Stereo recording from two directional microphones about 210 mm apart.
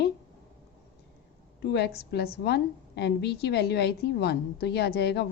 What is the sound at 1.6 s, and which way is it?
A woman's voice, 50° left (ahead or behind).